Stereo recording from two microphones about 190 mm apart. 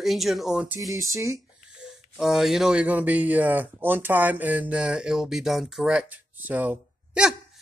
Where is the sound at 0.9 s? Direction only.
15° right (ahead or behind).